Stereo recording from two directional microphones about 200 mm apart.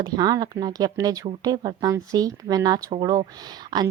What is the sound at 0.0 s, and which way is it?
A woman's voice, 20° right (ahead or behind).